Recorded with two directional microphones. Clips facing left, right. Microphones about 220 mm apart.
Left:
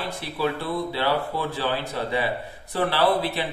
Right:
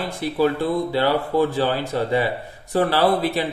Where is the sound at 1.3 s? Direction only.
45° right (ahead or behind).